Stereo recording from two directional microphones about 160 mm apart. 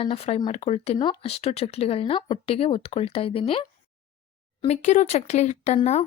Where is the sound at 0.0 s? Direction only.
40° left (ahead or behind).